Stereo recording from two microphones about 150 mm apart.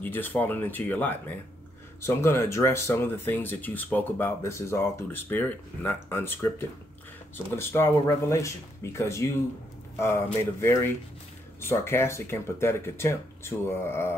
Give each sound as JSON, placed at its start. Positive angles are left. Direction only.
{"t": 0.0, "sound": "speech", "side_deg": 15}